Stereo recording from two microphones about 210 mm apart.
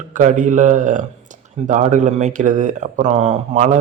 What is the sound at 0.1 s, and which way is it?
A man's voice, 35° right (ahead or behind).